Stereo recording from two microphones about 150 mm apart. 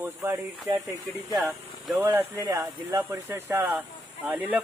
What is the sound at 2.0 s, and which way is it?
Speech, 20° right (ahead or behind).